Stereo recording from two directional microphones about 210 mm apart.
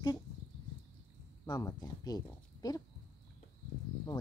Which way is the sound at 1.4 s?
15° left (ahead or behind).